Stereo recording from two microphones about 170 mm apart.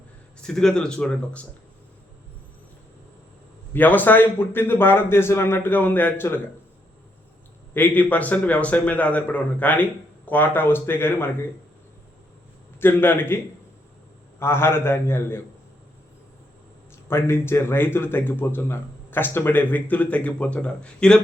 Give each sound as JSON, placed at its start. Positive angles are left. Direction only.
{"t": 0.4, "sound": "speech", "side_deg": 5}
{"t": 3.7, "sound": "speech", "side_deg": 10}
{"t": 7.7, "sound": "speech", "side_deg": 10}
{"t": 12.8, "sound": "speech", "side_deg": 15}
{"t": 17.1, "sound": "speech", "side_deg": 15}